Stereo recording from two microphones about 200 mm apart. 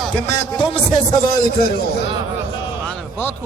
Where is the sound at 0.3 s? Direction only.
25° left (ahead or behind).